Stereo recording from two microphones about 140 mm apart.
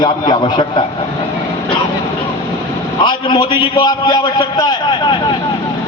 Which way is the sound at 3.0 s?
35° left (ahead or behind).